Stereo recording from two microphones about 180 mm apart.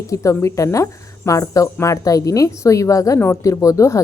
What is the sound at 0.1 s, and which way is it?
Speech, 15° left (ahead or behind).